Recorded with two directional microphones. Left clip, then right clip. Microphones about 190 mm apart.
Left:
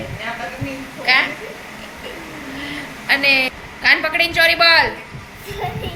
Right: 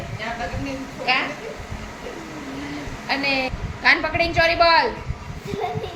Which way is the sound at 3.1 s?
10° right (ahead or behind).